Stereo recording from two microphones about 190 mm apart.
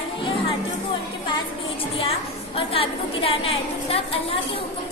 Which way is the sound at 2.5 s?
30° left (ahead or behind).